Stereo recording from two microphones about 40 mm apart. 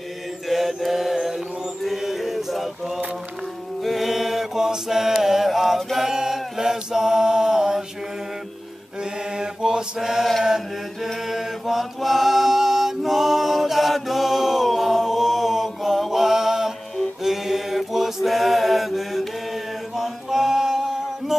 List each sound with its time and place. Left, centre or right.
0.5 s mantra: centre
1.8 s male singing: centre
3.8 s chant: centre
9.4 s mantra: centre
10.4 s chant: centre
11.2 s mantra: centre
20.0 s chant: centre